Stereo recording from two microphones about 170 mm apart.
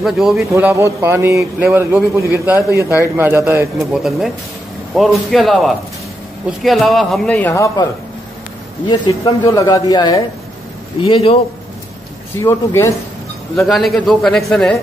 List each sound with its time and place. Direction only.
0.0 s a man's voice: centre (ahead or behind)
0.4 s a man's voice: 15° right (ahead or behind)
3.7 s a man's voice: centre (ahead or behind); by 7.8 s 20° left (ahead or behind)
8.8 s a man's voice: 25° left (ahead or behind)
11.0 s a man's voice: 35° left (ahead or behind)
12.4 s speech: 15° left (ahead or behind)
13.6 s a man's voice: centre (ahead or behind)